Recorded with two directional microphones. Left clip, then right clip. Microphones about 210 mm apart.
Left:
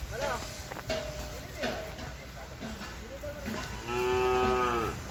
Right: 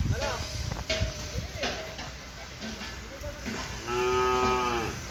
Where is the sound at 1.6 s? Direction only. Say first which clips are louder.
Right 2 dB; 50° left (ahead or behind).